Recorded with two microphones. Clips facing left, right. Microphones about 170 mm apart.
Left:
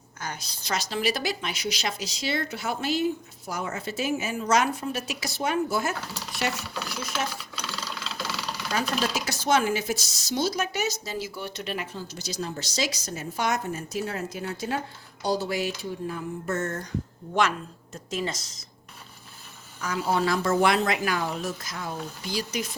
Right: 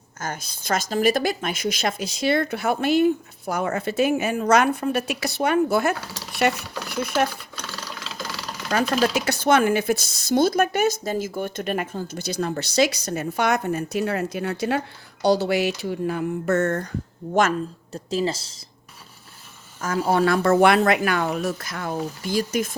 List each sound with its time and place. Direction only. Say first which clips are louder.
0.2 s a woman's voice: right 5 dB; 50° right (ahead or behind)
7.5 s a sound: even; centre (ahead or behind)
8.7 s a woman's voice: right 7 dB; 60° right (ahead or behind)
17.9 s speech: right 6 dB; 30° right (ahead or behind)
20.1 s a woman's voice: right 6 dB; 60° right (ahead or behind)